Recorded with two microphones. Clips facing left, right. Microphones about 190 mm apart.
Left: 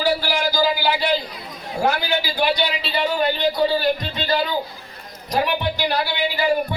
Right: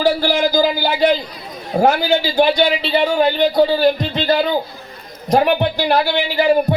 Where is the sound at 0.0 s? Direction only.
50° right (ahead or behind).